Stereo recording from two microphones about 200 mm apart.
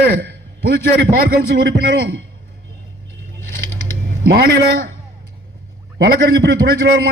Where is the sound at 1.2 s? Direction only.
55° right (ahead or behind).